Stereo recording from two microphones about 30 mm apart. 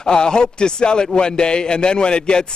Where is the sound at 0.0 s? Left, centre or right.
Left.